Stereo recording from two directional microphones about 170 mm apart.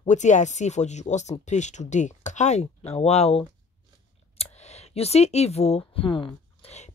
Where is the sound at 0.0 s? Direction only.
45° left (ahead or behind).